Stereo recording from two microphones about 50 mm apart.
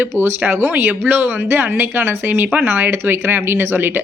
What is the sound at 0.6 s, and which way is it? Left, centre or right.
A woman's voice, right.